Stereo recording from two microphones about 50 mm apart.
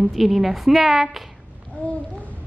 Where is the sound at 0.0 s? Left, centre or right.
Centre.